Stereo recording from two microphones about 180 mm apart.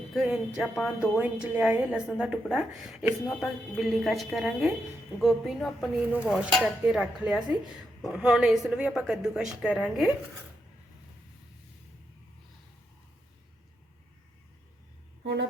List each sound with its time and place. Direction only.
0.1 s speech: centre (ahead or behind)
1.2 s speech: 5° right (ahead or behind)
15.2 s speech: 75° right (ahead or behind)